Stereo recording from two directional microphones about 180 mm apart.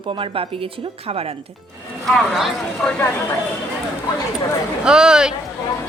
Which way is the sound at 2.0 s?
Centre (ahead or behind).